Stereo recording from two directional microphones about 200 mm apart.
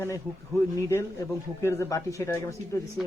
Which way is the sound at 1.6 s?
15° left (ahead or behind).